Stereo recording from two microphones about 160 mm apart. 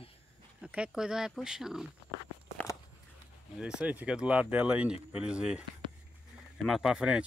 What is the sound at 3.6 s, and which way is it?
Speech, 10° right (ahead or behind).